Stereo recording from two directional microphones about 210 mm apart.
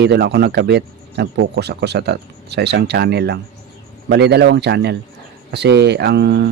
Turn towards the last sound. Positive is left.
turn(degrees=-50)  # may be behind; listen again after turning